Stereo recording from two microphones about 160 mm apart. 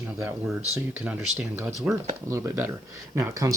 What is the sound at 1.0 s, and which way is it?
Speech, 10° right (ahead or behind).